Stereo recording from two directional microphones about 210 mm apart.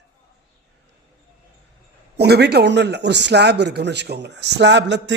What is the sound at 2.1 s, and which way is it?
Speech, 50° right (ahead or behind).